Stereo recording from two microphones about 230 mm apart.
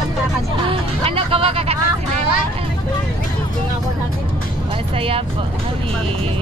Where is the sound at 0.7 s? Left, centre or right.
Right.